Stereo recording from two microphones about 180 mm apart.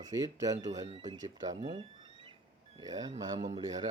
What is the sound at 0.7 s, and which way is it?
Speech, 35° right (ahead or behind).